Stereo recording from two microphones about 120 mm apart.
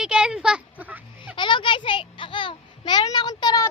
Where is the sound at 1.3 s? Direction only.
45° left (ahead or behind).